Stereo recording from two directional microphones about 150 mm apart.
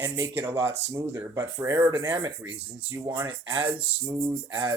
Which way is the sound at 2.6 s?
15° right (ahead or behind).